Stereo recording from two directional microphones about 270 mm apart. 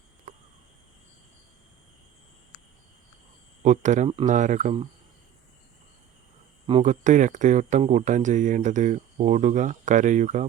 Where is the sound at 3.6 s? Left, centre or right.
Right.